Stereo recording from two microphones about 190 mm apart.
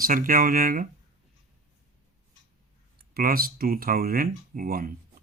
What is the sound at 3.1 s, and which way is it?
Speech, 50° right (ahead or behind).